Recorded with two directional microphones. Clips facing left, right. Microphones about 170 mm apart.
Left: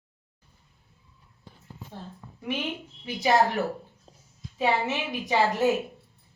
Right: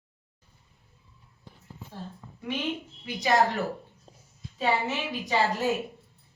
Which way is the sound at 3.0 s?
25° left (ahead or behind).